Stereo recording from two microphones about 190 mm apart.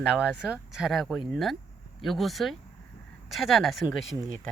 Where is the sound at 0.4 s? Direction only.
5° right (ahead or behind).